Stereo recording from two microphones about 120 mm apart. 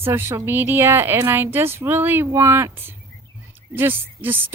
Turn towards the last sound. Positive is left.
turn(degrees=-15)  # may be behind; listen again after turning